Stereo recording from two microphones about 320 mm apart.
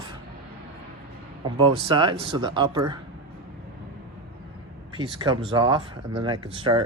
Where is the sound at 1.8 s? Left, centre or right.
Centre.